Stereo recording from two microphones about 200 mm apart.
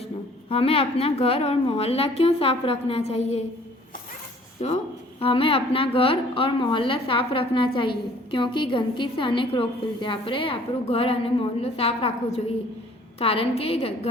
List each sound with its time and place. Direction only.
0.5 s a woman's voice: 30° left (ahead or behind)
4.6 s a woman's voice: 30° left (ahead or behind)